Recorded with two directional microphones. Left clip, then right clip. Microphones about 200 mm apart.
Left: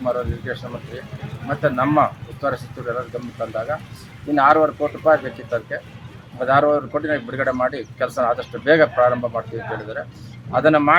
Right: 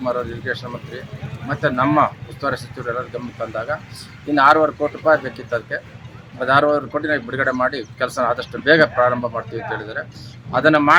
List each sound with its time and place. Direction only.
0.0 s speech: 5° right (ahead or behind)